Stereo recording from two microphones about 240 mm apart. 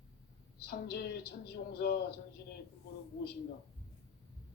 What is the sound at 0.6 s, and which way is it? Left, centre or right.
Speech, left.